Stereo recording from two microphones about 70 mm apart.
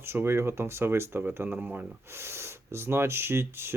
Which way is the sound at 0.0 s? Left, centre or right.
Right.